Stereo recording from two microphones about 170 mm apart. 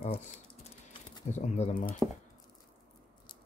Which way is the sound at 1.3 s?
45° left (ahead or behind).